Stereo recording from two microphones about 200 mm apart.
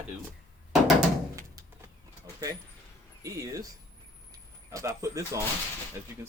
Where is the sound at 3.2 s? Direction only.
15° right (ahead or behind).